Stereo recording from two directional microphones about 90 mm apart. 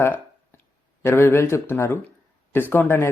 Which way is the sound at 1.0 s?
25° left (ahead or behind).